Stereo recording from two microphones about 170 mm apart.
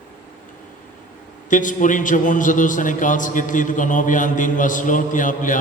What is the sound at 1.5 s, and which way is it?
A man's voice, 50° left (ahead or behind).